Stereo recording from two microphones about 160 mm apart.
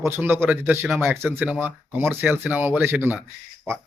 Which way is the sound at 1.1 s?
15° right (ahead or behind).